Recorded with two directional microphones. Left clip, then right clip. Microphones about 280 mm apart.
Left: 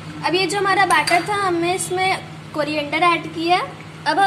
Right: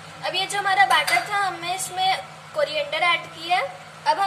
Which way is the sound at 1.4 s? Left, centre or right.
Centre.